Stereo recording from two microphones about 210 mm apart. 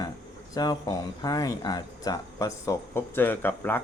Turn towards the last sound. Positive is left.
turn(degrees=10)  # may be behind; listen again after turning